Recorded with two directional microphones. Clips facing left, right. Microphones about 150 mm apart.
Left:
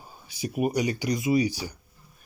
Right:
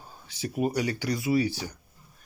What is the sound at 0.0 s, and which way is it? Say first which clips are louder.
Speech: left 2 dB; 10° left (ahead or behind).